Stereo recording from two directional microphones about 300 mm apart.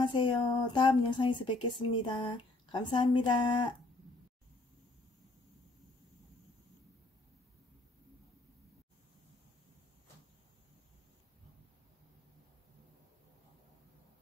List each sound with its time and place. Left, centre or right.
0.0 s speech: centre